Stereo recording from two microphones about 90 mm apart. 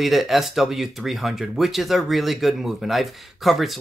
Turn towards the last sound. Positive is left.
turn(degrees=0)  # may be behind; listen again after turning